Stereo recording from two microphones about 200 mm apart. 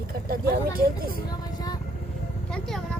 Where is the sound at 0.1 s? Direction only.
45° right (ahead or behind).